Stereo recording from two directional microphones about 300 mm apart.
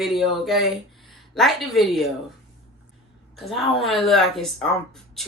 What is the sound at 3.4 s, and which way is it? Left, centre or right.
Speech, centre.